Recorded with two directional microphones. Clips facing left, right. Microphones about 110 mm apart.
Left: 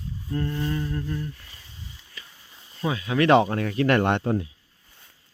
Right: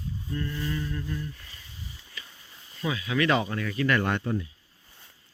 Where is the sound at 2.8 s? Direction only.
40° left (ahead or behind).